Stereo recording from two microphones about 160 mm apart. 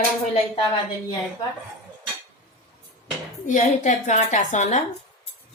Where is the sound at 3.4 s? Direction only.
50° left (ahead or behind).